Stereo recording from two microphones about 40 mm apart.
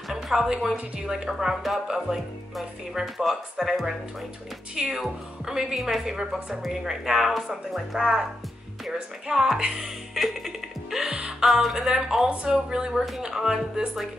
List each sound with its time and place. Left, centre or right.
0.1 s a woman's voice: centre
4.8 s speech: centre
5.8 s speech: centre
8.0 s speech: centre
9.3 s speech: centre
10.1 s music: centre
11.0 s music: right
11.4 s speech: centre
12.9 s speech: centre